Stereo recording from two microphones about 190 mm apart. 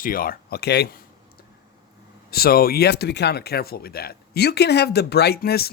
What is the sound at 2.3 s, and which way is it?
Speech, 55° left (ahead or behind).